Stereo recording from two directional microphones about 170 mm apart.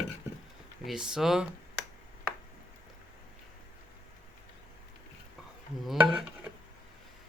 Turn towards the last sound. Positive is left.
turn(degrees=-5)  # may be behind; listen again after turning